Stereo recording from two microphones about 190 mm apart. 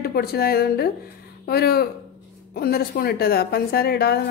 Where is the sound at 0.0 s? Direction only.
55° left (ahead or behind).